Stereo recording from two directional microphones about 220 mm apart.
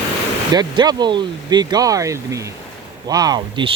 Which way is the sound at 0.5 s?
20° right (ahead or behind).